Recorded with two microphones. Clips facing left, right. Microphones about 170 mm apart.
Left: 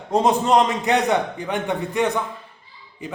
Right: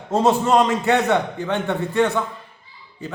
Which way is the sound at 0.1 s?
15° left (ahead or behind).